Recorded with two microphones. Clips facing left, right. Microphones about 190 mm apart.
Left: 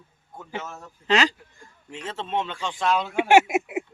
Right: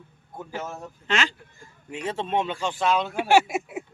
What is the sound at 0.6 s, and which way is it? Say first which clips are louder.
Speech: right 4 dB; 15° right (ahead or behind).